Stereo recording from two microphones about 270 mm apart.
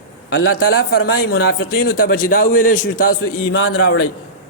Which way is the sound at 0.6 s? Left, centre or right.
Left.